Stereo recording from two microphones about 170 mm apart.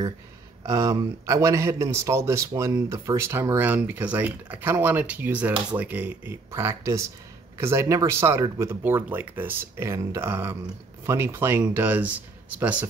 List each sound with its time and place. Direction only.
0.7 s a man's voice: 20° right (ahead or behind)